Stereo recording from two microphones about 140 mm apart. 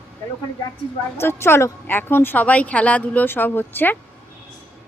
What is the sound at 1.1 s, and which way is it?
A woman's voice, 20° left (ahead or behind).